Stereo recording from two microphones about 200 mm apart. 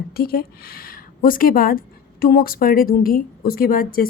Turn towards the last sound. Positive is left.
turn(degrees=45)  # may be behind; listen again after turning